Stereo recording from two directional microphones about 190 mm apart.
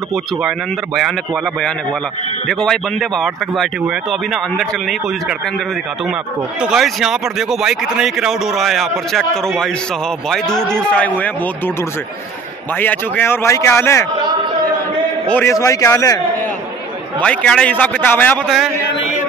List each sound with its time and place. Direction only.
0.9 s a man's voice: centre (ahead or behind)
6.6 s a man's voice: centre (ahead or behind)
10.7 s a man's voice: 5° left (ahead or behind)
12.7 s a man's voice: 10° left (ahead or behind)
15.2 s a man's voice: 10° left (ahead or behind)
17.2 s a man's voice: 5° left (ahead or behind)